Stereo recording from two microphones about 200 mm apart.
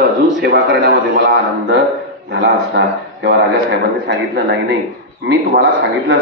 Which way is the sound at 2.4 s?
60° right (ahead or behind).